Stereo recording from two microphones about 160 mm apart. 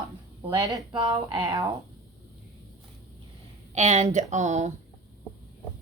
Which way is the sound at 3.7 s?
45° right (ahead or behind).